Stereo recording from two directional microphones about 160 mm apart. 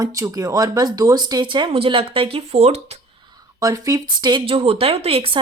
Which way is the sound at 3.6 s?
20° right (ahead or behind).